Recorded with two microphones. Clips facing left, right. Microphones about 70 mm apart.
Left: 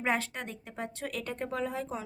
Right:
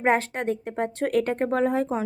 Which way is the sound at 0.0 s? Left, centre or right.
Right.